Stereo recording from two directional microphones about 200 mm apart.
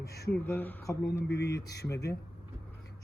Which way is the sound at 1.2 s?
55° left (ahead or behind).